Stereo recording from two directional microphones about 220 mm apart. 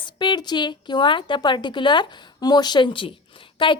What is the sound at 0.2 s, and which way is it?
A woman's voice, 20° left (ahead or behind).